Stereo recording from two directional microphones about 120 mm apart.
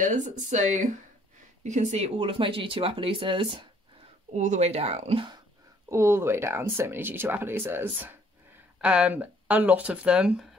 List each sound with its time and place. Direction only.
0.0 s speech: 90° right
1.6 s speech: 75° right (ahead or behind)
2.1 s speech: 45° right (ahead or behind)
4.3 s speech: 75° right (ahead or behind); by 5.2 s 60° right (ahead or behind)
5.9 s speech: 25° right (ahead or behind); by 10.5 s 5° right (ahead or behind)